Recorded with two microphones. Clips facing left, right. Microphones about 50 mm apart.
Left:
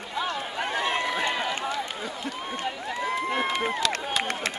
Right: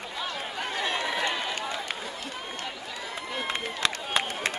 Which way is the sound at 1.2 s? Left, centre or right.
Left.